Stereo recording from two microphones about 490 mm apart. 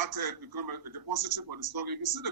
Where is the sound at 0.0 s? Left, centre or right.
Right.